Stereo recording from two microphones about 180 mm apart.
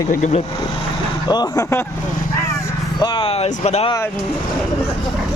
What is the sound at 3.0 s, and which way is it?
Speech, 25° left (ahead or behind).